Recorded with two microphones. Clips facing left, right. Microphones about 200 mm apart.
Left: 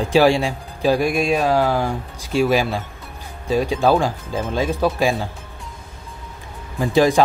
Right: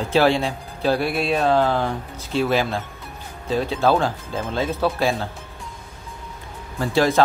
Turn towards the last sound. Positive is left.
turn(degrees=15)  # may be behind; listen again after turning